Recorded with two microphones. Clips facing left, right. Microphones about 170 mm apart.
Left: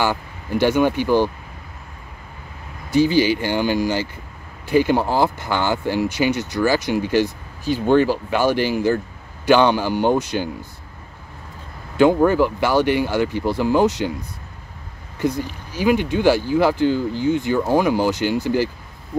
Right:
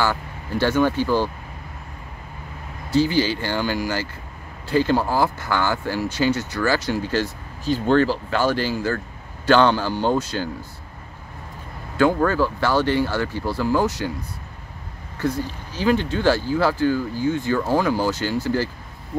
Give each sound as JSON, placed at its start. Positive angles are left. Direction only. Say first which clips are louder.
{"t": 0.0, "sound": "speech", "louder": "left 2 dB", "side_deg": 15}
{"t": 2.9, "sound": "speech", "louder": "left 3 dB", "side_deg": 15}
{"t": 12.0, "sound": "speech", "louder": "left 4 dB", "side_deg": 20}
{"t": 15.1, "sound": "speech", "louder": "left 2 dB", "side_deg": 15}